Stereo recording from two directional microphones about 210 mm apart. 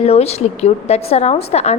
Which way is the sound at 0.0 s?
30° left (ahead or behind).